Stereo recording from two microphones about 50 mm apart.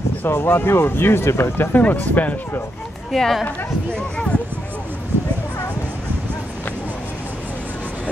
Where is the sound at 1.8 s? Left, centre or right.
Left.